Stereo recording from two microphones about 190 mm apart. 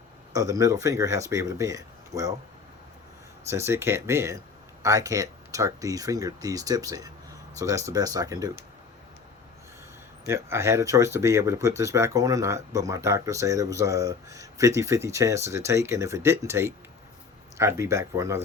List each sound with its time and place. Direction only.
0.3 s speech: 15° right (ahead or behind)
3.5 s speech: 15° right (ahead or behind)
10.2 s speech: 15° right (ahead or behind)